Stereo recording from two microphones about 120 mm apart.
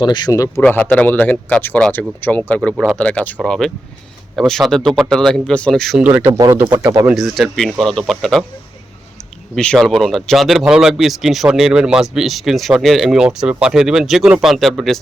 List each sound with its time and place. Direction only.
0.0 s speech: 35° left (ahead or behind)
0.6 s a man's voice: 15° left (ahead or behind)
6.0 s speech: 15° right (ahead or behind)
7.1 s speech: centre (ahead or behind)
9.6 s speech: 5° left (ahead or behind)